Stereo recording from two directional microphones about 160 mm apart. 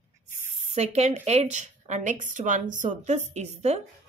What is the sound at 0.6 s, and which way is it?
A woman's voice, 45° right (ahead or behind).